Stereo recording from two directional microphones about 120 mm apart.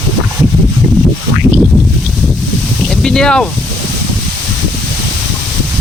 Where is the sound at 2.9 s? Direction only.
5° left (ahead or behind).